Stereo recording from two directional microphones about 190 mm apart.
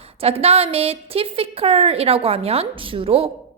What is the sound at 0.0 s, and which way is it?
A woman's voice, 30° right (ahead or behind).